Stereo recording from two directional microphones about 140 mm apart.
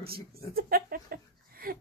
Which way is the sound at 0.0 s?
90° right.